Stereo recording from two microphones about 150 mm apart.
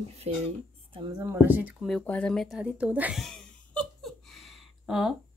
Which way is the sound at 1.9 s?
10° left (ahead or behind).